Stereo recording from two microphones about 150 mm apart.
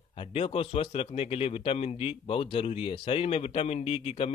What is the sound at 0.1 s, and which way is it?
Speech, 40° left (ahead or behind).